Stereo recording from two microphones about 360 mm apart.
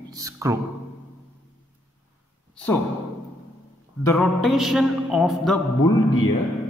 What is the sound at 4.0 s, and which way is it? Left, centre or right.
Mantra, centre.